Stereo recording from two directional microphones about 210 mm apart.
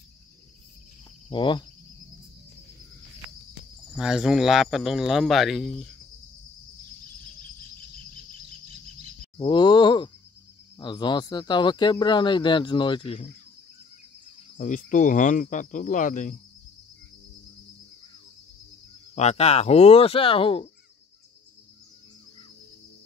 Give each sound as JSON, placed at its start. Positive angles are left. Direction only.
{"t": 1.3, "sound": "speech", "side_deg": 20}
{"t": 3.9, "sound": "speech", "side_deg": -5}
{"t": 9.4, "sound": "speech", "side_deg": 20}
{"t": 14.6, "sound": "speech", "side_deg": 35}
{"t": 19.1, "sound": "speech", "side_deg": 30}